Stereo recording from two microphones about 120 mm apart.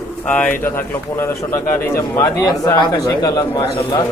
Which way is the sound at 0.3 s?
15° left (ahead or behind).